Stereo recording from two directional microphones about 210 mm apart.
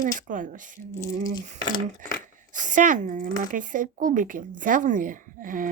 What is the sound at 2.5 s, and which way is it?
Speech, 35° right (ahead or behind).